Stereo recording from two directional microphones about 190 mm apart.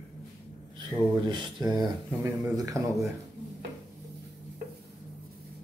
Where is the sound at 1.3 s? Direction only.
20° right (ahead or behind).